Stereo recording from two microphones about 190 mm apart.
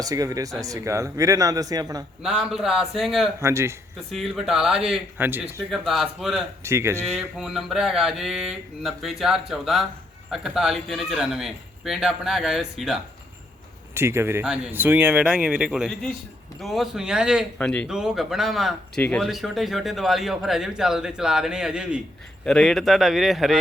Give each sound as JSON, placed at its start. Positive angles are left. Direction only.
{"t": 0.0, "sound": "speech", "side_deg": -20}
{"t": 2.2, "sound": "speech", "side_deg": 0}
{"t": 3.4, "sound": "speech", "side_deg": -15}
{"t": 4.1, "sound": "speech", "side_deg": 0}
{"t": 6.6, "sound": "speech", "side_deg": -15}
{"t": 7.2, "sound": "speech", "side_deg": 0}
{"t": 13.9, "sound": "speech", "side_deg": -15}